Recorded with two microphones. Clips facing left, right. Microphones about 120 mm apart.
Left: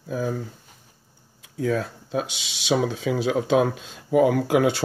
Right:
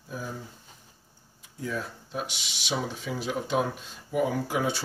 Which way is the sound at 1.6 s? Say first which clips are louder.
Left 9 dB; 90° left.